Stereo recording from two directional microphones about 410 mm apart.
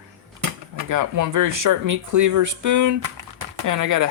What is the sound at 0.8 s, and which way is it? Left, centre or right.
Speech, right.